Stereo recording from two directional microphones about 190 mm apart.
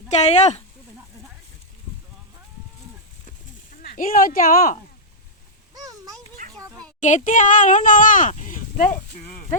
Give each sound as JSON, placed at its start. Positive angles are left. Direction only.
{"t": 0.1, "sound": "speech", "side_deg": 35}
{"t": 3.8, "sound": "speech", "side_deg": 45}
{"t": 5.7, "sound": "a sound", "side_deg": -20}
{"t": 7.0, "sound": "speech", "side_deg": 40}